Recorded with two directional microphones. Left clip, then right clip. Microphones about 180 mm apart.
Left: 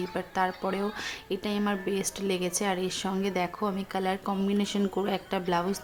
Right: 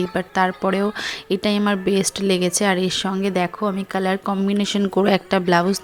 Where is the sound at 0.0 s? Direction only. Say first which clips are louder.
Right 9 dB; 30° right (ahead or behind).